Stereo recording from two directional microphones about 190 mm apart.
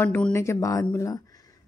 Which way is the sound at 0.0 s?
10° left (ahead or behind).